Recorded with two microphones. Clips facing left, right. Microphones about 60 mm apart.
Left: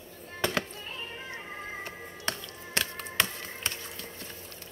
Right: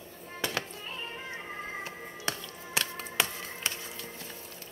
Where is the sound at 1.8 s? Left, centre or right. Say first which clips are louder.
Even; centre.